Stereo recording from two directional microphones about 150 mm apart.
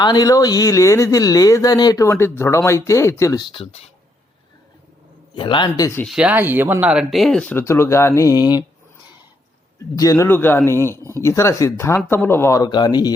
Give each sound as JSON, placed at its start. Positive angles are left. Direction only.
{"t": 0.0, "sound": "speech", "side_deg": 25}
{"t": 3.4, "sound": "speech", "side_deg": 35}
{"t": 5.3, "sound": "speech", "side_deg": 30}
{"t": 6.1, "sound": "speech", "side_deg": -5}
{"t": 7.5, "sound": "speech", "side_deg": 15}
{"t": 9.9, "sound": "speech", "side_deg": 25}